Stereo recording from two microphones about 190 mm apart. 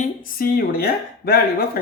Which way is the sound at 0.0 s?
45° left (ahead or behind).